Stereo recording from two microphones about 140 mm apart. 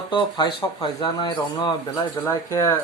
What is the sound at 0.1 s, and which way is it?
Speech, 35° left (ahead or behind).